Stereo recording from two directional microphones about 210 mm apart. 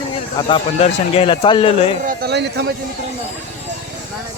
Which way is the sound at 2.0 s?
50° right (ahead or behind).